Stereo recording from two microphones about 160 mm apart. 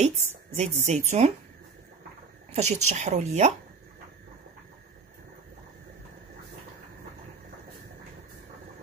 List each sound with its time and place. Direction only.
0.0 s speech: 45° right (ahead or behind)
2.5 s speech: 45° right (ahead or behind)